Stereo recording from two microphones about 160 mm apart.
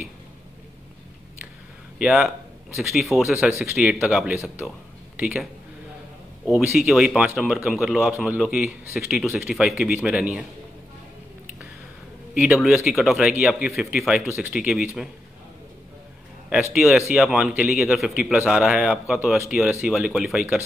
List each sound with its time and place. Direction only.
2.0 s speech: centre (ahead or behind)
3.4 s speech: 15° right (ahead or behind)
3.7 s speech: 5° right (ahead or behind)
12.4 s speech: centre (ahead or behind)
16.7 s speech: centre (ahead or behind)